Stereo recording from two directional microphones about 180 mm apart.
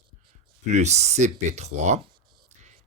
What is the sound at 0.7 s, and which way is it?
Speech, 40° right (ahead or behind).